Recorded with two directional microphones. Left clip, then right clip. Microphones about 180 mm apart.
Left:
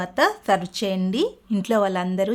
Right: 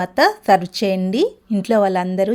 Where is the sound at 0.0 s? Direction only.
25° right (ahead or behind).